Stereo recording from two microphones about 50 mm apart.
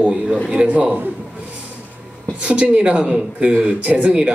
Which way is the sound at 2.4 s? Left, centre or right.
Right.